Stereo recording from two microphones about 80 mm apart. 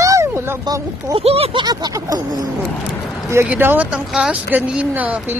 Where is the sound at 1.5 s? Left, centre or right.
Right.